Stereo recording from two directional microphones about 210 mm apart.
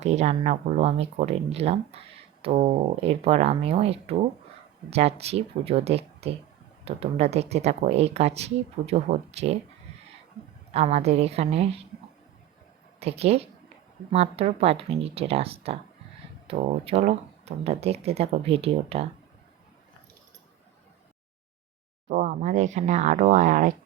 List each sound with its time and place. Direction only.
0.0 s speech: 30° right (ahead or behind)
10.7 s speech: 30° right (ahead or behind)
13.0 s speech: 30° right (ahead or behind)
22.1 s speech: 35° right (ahead or behind)